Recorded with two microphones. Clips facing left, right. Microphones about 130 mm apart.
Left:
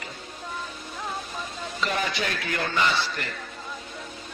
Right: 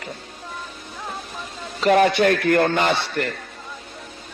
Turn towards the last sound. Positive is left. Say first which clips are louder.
# right 5 dB
turn(degrees=-60)  # may be behind; listen again after turning